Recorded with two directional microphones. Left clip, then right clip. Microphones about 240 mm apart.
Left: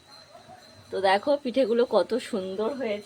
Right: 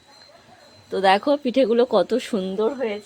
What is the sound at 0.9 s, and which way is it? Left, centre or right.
Speech, right.